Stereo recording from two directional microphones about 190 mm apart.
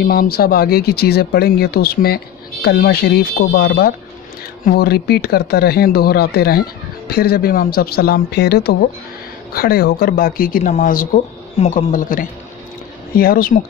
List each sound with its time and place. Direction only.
0.0 s speech: 50° left (ahead or behind)